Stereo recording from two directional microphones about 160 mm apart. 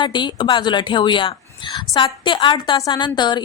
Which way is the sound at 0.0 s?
30° left (ahead or behind).